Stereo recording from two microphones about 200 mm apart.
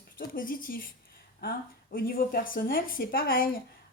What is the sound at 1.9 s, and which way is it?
Speech, 45° left (ahead or behind).